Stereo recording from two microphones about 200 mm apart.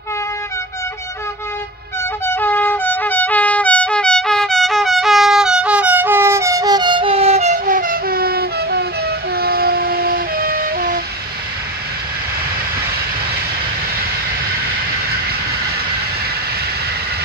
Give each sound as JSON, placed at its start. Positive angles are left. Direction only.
{"t": 2.2, "sound": "music", "side_deg": 10}
{"t": 9.3, "sound": "train", "side_deg": -50}